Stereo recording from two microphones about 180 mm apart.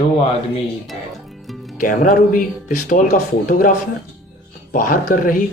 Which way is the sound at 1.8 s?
50° left (ahead or behind).